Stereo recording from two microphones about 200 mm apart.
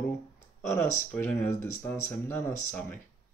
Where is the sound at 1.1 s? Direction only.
10° left (ahead or behind).